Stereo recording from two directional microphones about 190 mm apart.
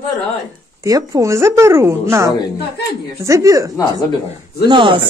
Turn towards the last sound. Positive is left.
turn(degrees=-25)  # may be behind; listen again after turning